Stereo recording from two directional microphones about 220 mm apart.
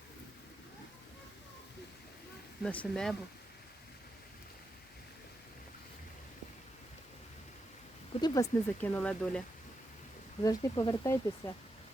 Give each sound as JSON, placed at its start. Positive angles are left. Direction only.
{"t": 2.6, "sound": "speech", "side_deg": 5}
{"t": 8.2, "sound": "speech", "side_deg": 10}
{"t": 10.4, "sound": "speech", "side_deg": 15}